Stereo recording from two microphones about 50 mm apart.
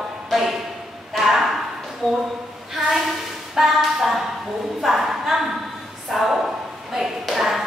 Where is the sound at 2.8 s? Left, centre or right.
Centre.